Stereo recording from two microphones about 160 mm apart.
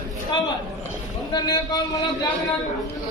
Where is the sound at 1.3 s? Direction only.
25° left (ahead or behind).